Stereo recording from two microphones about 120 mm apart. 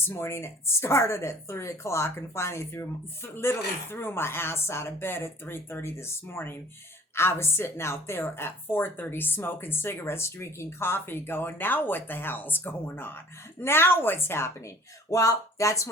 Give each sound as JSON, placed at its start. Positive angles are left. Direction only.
{"t": 0.0, "sound": "a woman's voice", "side_deg": 20}